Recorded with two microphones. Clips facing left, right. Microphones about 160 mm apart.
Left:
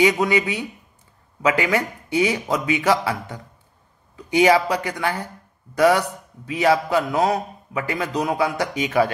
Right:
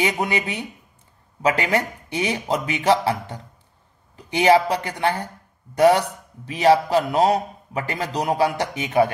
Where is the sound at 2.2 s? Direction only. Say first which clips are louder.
Right 1 dB; 30° right (ahead or behind).